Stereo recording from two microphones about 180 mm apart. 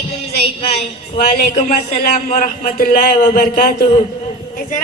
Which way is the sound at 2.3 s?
50° left (ahead or behind).